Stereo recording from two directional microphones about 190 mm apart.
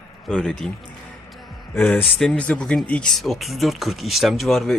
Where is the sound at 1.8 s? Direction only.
10° left (ahead or behind).